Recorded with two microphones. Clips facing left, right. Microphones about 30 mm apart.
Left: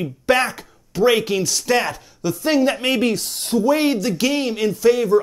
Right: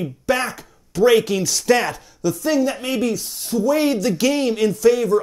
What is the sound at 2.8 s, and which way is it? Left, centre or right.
Speech, left.